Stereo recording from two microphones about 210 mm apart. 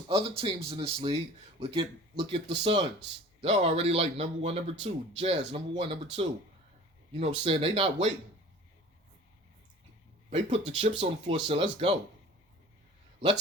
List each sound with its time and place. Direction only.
0.1 s speech: 25° right (ahead or behind)
10.2 s speech: 30° right (ahead or behind)